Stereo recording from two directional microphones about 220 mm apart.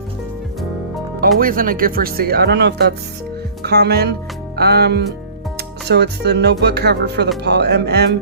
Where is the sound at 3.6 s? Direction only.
50° right (ahead or behind).